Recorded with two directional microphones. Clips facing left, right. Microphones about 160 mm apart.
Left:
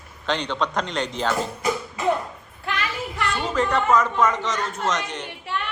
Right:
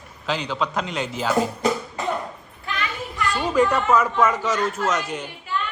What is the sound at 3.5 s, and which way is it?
A man's voice, 10° right (ahead or behind).